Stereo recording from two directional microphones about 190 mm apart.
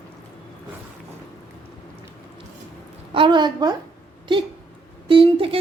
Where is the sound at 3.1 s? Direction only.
25° right (ahead or behind).